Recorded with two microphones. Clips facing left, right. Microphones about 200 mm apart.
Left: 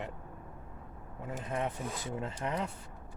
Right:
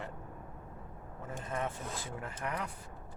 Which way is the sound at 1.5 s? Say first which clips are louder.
Left 2 dB; 20° left (ahead or behind).